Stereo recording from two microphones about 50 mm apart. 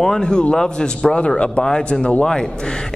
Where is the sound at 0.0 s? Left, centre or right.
Centre.